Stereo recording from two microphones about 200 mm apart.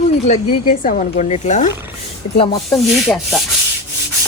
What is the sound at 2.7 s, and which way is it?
Rub, centre (ahead or behind).